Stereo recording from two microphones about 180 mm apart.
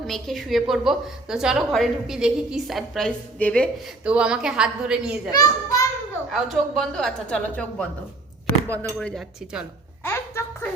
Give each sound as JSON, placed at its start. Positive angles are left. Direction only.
{"t": 0.1, "sound": "a woman's voice", "side_deg": 0}
{"t": 4.0, "sound": "a woman's voice", "side_deg": -5}
{"t": 5.3, "sound": "a child's voice", "side_deg": 20}
{"t": 6.3, "sound": "a woman's voice", "side_deg": 0}
{"t": 10.0, "sound": "a sound", "side_deg": 10}